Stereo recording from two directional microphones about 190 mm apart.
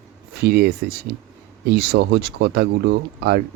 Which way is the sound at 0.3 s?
60° right (ahead or behind).